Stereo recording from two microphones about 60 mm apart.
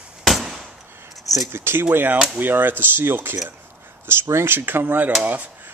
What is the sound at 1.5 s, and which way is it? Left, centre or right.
Speech, right.